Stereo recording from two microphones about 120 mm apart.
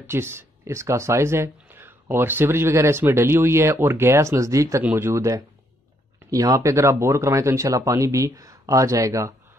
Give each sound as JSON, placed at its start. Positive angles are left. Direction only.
{"t": 0.0, "sound": "speech", "side_deg": -20}